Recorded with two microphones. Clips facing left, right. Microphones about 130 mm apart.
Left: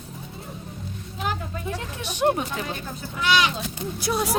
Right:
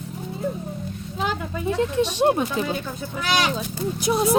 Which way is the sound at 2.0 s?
25° right (ahead or behind).